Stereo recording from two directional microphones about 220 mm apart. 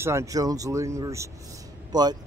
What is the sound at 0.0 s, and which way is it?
Speech, 15° right (ahead or behind).